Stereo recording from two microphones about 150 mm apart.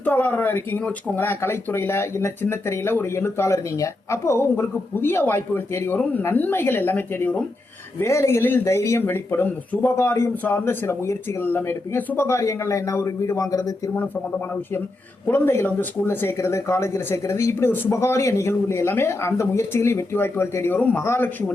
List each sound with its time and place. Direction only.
0.0 s speech: 10° left (ahead or behind)
15.3 s speech: 15° left (ahead or behind)